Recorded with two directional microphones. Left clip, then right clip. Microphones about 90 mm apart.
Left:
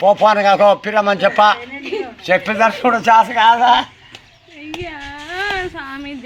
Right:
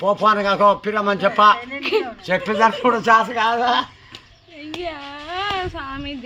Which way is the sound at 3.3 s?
70° right (ahead or behind).